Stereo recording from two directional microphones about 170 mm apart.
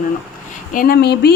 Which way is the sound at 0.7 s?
65° left (ahead or behind).